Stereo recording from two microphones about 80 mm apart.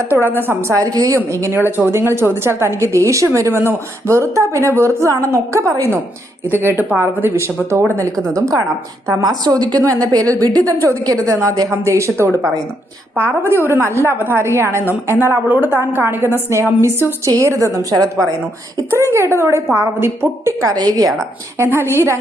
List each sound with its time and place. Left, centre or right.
0.1 s speech: right
0.8 s a woman's voice: right
1.7 s a woman's voice: right
6.5 s speech: right
8.1 s a woman's voice: centre
8.4 s a woman's voice: right
15.3 s a woman's voice: right
18.9 s a woman's voice: right
20.7 s a woman's voice: right
21.6 s a woman's voice: right